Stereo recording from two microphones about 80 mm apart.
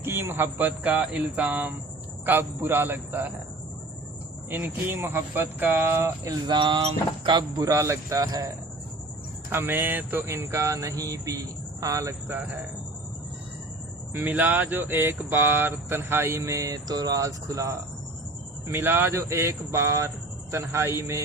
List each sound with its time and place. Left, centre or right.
0.0 s speech: right
4.4 s speech: right
6.5 s speech: right
7.3 s speech: right
7.6 s speech: right
9.5 s a sound: right
14.1 s speech: right
18.7 s a sound: right